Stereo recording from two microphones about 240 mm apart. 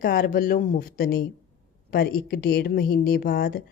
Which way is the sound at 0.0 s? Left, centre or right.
Left.